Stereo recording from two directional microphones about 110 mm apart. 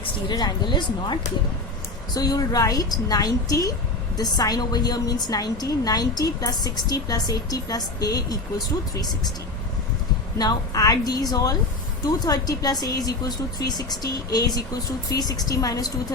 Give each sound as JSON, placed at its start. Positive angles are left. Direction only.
{"t": 0.3, "sound": "a woman's voice", "side_deg": 40}
{"t": 10.3, "sound": "a woman's voice", "side_deg": 35}